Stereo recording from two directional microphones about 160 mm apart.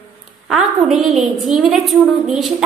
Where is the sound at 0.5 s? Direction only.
Centre (ahead or behind).